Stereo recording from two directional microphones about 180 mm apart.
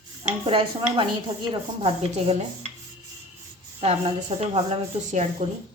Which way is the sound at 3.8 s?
35° right (ahead or behind).